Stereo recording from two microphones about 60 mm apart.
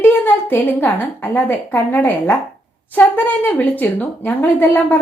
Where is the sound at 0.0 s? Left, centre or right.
Left.